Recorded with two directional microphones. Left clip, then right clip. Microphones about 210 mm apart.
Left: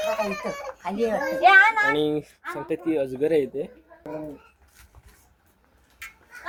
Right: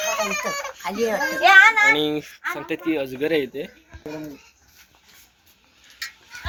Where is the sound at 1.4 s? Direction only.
25° right (ahead or behind).